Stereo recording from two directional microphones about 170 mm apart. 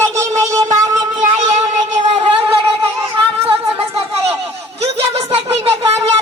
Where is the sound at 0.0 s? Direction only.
15° right (ahead or behind).